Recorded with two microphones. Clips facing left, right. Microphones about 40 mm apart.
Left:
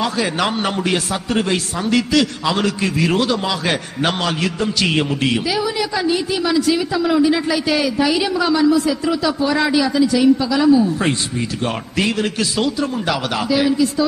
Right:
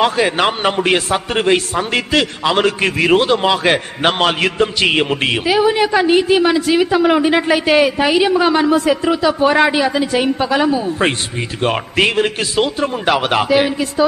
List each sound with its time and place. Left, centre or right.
0.0 s a man's voice: right